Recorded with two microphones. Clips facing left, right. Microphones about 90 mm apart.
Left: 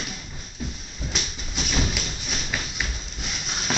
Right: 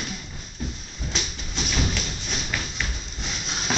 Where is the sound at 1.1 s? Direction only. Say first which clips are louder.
Right 1 dB; 5° left (ahead or behind).